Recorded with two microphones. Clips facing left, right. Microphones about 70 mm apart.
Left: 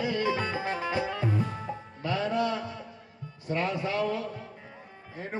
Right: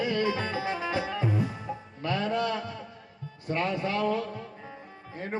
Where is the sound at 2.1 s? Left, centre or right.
Right.